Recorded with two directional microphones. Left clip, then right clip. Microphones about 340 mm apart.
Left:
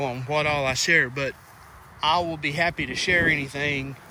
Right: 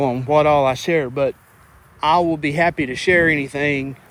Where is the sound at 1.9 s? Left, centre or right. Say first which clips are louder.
Right 7 dB; right.